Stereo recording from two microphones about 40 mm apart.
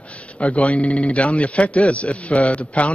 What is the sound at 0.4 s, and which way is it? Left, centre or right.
A man's voice, left.